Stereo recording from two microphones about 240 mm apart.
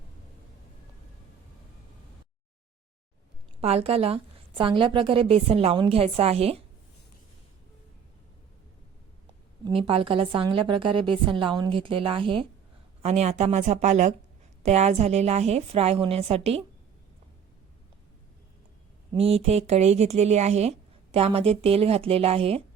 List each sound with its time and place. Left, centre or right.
3.6 s speech: right
9.6 s speech: right
19.1 s speech: right